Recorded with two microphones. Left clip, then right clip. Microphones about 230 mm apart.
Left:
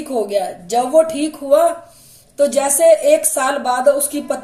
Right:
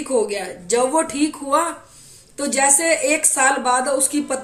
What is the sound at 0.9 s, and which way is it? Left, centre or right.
A woman's voice, right.